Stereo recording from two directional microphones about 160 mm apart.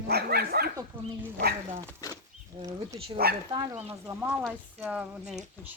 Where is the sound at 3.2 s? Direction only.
75° right (ahead or behind).